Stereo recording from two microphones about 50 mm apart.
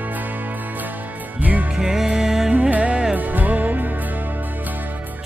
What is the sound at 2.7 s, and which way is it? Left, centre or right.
Music, right.